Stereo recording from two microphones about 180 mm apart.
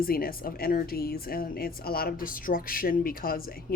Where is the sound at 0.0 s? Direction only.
55° left (ahead or behind).